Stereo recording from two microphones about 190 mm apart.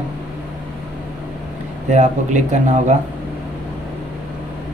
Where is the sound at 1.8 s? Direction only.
40° right (ahead or behind).